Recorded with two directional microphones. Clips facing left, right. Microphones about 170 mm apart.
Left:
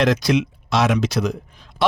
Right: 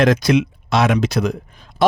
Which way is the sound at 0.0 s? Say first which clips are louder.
Right 3 dB; 50° right (ahead or behind).